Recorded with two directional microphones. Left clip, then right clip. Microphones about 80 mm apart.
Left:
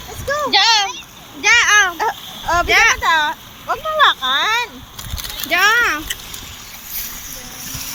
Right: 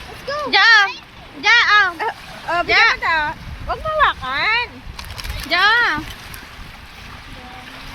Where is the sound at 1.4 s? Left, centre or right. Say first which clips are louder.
Left 1 dB; centre.